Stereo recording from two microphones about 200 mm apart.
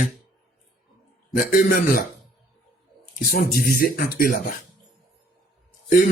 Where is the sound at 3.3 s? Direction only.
50° left (ahead or behind).